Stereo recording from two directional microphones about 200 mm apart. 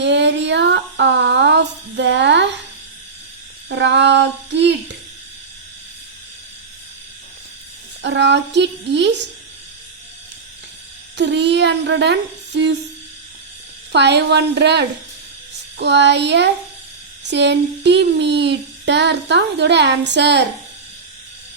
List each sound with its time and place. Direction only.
0.0 s a sound: 60° right (ahead or behind)
3.7 s child singing: 60° right (ahead or behind)
8.0 s child singing: 60° right (ahead or behind)
11.2 s child singing: 60° right (ahead or behind)
13.9 s child singing: 60° right (ahead or behind)